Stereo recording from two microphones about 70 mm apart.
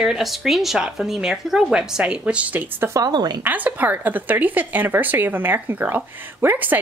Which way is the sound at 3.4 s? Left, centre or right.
Right.